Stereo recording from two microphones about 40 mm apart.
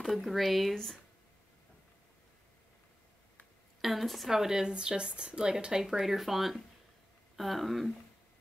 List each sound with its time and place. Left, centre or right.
0.0 s speech: centre
3.8 s speech: centre
4.3 s speech: centre